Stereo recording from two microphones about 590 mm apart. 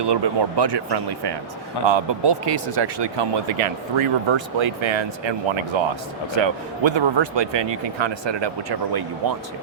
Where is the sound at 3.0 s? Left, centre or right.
Right.